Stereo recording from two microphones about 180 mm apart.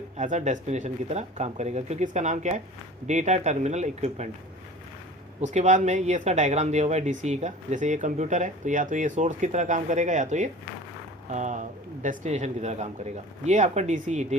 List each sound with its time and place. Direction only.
0.2 s speech: 40° right (ahead or behind)
5.4 s speech: 40° right (ahead or behind)